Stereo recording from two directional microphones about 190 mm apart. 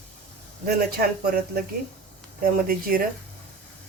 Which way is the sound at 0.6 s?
55° right (ahead or behind).